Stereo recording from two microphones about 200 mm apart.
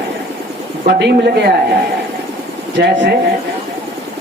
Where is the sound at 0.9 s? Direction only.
55° right (ahead or behind).